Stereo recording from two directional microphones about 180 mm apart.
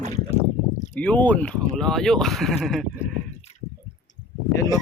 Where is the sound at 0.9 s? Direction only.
10° left (ahead or behind).